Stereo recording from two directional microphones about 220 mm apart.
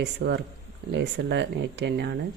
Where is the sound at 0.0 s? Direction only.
50° right (ahead or behind).